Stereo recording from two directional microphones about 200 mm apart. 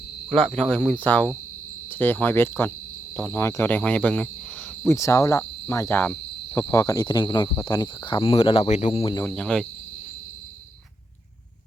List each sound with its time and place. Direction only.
0.3 s speech: 5° left (ahead or behind)
4.9 s cricket: 15° left (ahead or behind)
9.2 s speech: 5° left (ahead or behind)